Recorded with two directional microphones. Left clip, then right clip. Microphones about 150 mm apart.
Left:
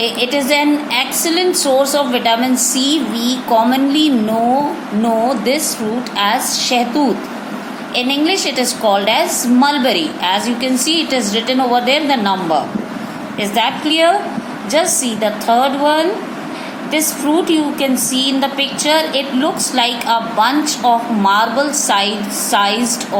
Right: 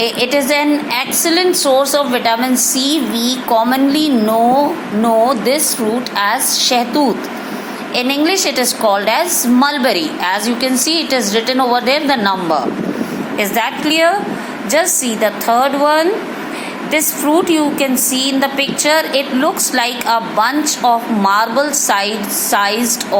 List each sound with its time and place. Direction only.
0.0 s a woman's voice: 15° right (ahead or behind)